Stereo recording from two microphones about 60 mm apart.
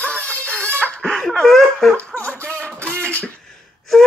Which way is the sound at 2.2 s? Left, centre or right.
Left.